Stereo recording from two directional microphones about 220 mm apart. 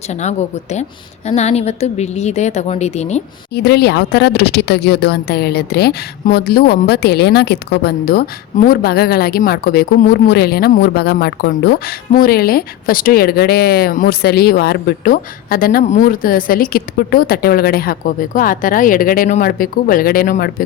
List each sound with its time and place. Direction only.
0.1 s a woman's voice: 30° left (ahead or behind)
3.5 s a woman's voice: 50° left (ahead or behind)